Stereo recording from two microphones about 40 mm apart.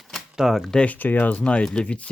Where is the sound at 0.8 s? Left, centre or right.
Left.